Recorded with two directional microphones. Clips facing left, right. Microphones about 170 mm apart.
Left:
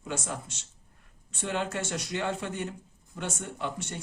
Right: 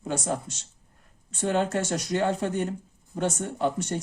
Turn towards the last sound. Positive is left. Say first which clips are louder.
# right 8 dB
turn(degrees=-40)  # may be behind; listen again after turning